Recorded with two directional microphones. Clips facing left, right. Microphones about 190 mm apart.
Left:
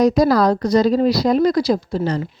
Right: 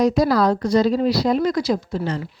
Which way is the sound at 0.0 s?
40° left (ahead or behind).